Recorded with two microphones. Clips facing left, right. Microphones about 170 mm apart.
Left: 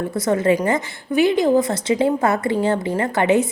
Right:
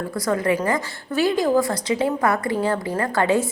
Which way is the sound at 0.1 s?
25° left (ahead or behind).